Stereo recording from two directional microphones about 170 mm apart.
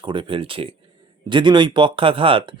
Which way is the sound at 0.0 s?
30° right (ahead or behind).